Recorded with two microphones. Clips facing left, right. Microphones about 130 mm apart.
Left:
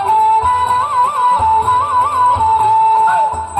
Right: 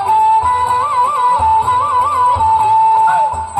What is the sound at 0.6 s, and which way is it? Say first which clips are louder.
Music: even; 25° right (ahead or behind).